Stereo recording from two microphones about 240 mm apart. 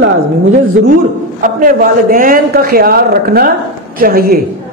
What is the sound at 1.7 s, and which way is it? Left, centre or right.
A woman's voice, right.